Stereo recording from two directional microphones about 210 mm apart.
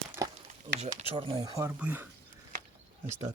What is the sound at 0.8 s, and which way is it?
Speech, 30° right (ahead or behind).